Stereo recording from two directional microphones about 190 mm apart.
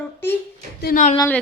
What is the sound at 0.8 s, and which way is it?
Speech, 50° left (ahead or behind).